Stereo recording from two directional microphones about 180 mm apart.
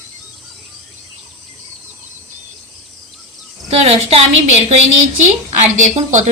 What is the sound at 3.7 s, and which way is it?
A woman's voice, 35° right (ahead or behind).